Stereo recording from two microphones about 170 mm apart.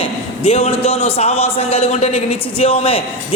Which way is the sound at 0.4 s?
35° left (ahead or behind).